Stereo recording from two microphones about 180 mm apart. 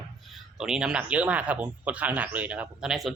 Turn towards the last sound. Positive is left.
turn(degrees=0)  # may be behind; listen again after turning